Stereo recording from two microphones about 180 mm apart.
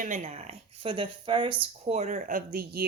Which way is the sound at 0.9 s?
25° right (ahead or behind).